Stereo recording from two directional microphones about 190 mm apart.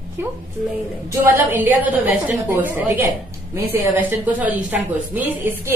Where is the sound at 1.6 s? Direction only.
10° right (ahead or behind).